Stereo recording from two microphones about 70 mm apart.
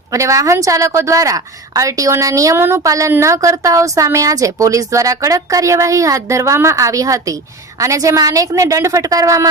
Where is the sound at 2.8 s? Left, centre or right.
Right.